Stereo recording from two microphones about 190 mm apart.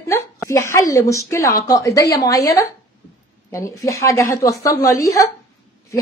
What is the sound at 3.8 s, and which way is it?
Speech, 15° left (ahead or behind).